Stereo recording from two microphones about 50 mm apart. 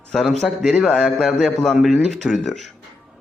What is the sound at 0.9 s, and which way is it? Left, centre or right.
Speech, centre.